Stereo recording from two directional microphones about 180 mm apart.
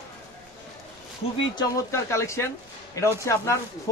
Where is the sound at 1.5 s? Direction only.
15° left (ahead or behind).